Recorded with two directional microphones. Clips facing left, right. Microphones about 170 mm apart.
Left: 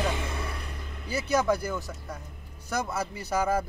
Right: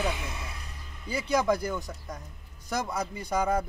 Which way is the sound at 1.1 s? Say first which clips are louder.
Even; 5° left (ahead or behind).